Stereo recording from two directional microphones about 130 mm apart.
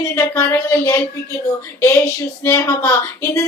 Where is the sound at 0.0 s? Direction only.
25° left (ahead or behind).